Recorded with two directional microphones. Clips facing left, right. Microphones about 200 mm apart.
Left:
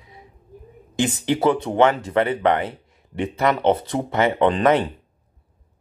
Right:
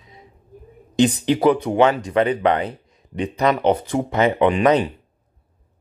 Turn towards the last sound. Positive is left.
turn(degrees=-15)  # may be behind; listen again after turning